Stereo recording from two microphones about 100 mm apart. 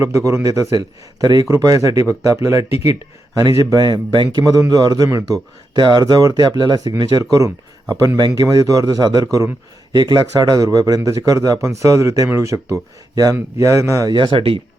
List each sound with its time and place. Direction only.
0.0 s a man's voice: 30° right (ahead or behind); by 4.4 s 50° right (ahead or behind)
4.7 s a man's voice: 40° right (ahead or behind)
5.7 s a man's voice: 45° right (ahead or behind)
9.9 s a man's voice: 45° right (ahead or behind)
14.1 s speech: 50° right (ahead or behind)